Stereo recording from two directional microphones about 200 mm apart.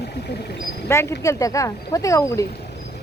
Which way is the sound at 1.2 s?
15° left (ahead or behind).